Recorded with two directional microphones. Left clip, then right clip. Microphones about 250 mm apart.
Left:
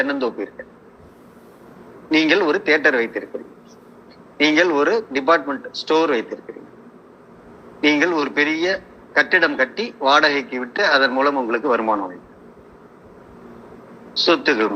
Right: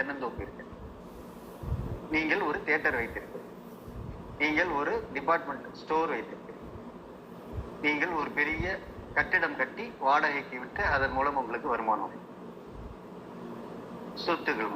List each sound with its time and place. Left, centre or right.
0.0 s a man's voice: left
2.0 s a man's voice: left
4.4 s a man's voice: left
7.8 s a man's voice: left
14.3 s a man's voice: left